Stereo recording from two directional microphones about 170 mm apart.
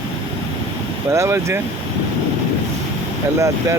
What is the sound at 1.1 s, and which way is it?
Speech, 15° right (ahead or behind).